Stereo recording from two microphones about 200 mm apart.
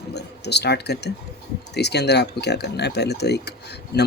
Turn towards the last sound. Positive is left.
turn(degrees=55)  # may be behind; listen again after turning